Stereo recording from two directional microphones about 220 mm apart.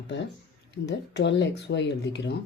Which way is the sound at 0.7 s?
50° left (ahead or behind).